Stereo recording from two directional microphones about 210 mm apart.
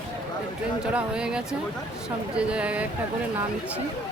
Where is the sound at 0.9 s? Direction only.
5° right (ahead or behind).